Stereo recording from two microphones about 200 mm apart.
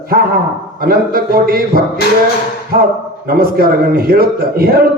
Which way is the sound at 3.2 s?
50° right (ahead or behind).